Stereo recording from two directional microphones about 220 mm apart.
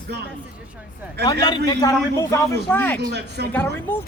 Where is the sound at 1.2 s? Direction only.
20° left (ahead or behind).